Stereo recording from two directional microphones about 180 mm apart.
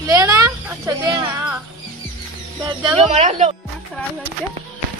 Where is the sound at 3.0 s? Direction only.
40° right (ahead or behind).